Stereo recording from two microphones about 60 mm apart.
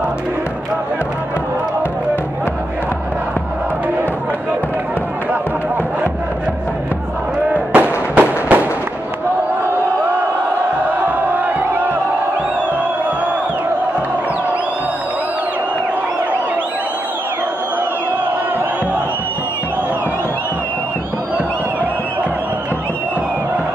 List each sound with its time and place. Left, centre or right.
7.4 s fireworks: right
11.1 s crowd: right